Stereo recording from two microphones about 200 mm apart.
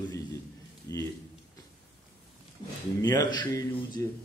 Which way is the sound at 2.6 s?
25° left (ahead or behind).